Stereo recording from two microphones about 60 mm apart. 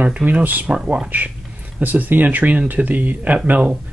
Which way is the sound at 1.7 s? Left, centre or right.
Right.